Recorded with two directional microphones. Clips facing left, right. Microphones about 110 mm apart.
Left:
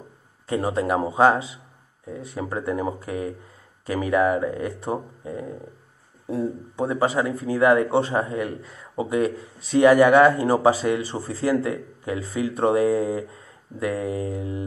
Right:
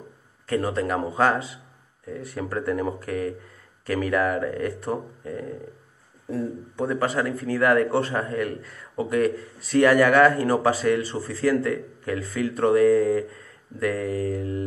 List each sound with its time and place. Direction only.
0.5 s a man's voice: 15° left (ahead or behind)
6.8 s a man's voice: 30° left (ahead or behind)
7.1 s speech: 10° left (ahead or behind)
10.4 s a man's voice: 25° left (ahead or behind)
10.7 s speech: 5° left (ahead or behind)
11.1 s a man's voice: 20° left (ahead or behind)